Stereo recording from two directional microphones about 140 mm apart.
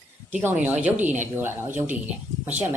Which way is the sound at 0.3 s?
15° right (ahead or behind).